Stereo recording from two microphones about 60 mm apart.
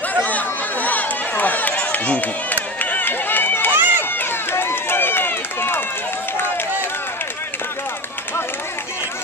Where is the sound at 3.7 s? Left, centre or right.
Right.